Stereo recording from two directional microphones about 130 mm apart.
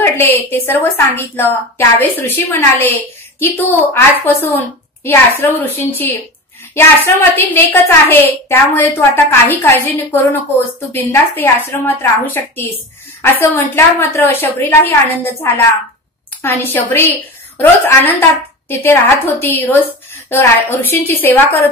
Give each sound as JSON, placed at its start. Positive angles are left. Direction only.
{"t": 0.0, "sound": "a woman's voice", "side_deg": 15}
{"t": 16.4, "sound": "a woman's voice", "side_deg": 15}